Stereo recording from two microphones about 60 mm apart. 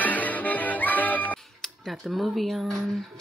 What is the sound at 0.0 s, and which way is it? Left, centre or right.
Music, left.